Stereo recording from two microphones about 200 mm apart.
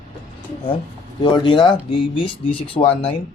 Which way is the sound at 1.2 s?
25° left (ahead or behind).